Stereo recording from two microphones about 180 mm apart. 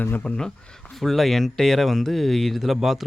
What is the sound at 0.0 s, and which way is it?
Speech, 10° left (ahead or behind).